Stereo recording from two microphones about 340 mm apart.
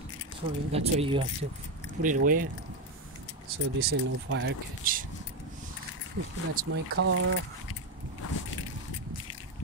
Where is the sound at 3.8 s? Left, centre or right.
Right.